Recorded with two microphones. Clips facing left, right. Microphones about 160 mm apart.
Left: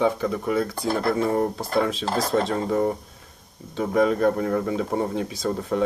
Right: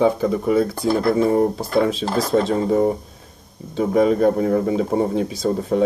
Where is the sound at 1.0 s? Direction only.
35° right (ahead or behind).